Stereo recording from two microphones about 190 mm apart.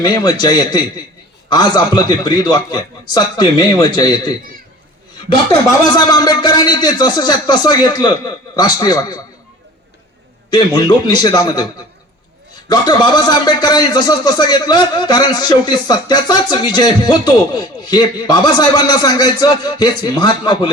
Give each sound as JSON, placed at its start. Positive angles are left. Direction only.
{"t": 0.0, "sound": "a man's voice", "side_deg": 20}
{"t": 5.5, "sound": "a man's voice", "side_deg": 20}
{"t": 10.5, "sound": "a man's voice", "side_deg": 20}
{"t": 12.6, "sound": "a man's voice", "side_deg": 20}